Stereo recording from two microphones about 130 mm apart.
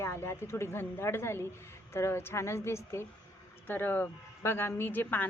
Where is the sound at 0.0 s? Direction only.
20° left (ahead or behind).